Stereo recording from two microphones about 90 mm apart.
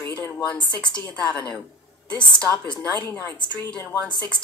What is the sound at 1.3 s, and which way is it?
Speech, 15° left (ahead or behind).